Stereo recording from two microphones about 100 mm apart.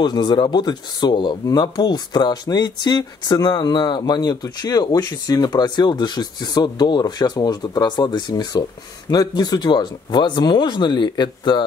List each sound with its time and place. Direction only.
0.0 s speech: 45° left (ahead or behind)